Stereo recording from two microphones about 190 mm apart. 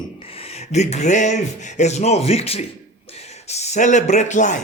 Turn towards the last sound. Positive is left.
turn(degrees=40)  # may be behind; listen again after turning